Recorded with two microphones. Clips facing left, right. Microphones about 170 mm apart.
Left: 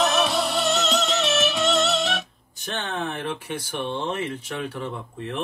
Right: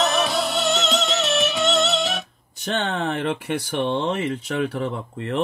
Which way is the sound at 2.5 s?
70° right (ahead or behind).